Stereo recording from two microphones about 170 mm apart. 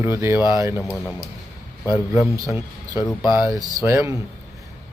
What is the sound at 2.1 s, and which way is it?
Speech, 15° right (ahead or behind).